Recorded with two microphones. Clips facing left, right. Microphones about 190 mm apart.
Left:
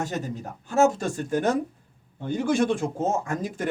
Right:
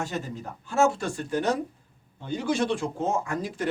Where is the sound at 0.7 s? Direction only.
40° left (ahead or behind).